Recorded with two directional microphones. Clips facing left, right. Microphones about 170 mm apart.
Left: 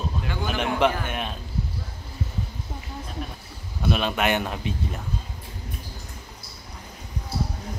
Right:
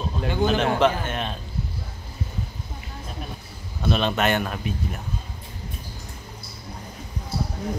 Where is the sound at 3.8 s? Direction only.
10° left (ahead or behind).